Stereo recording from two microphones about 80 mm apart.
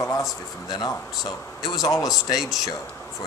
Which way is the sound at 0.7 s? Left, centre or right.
Left.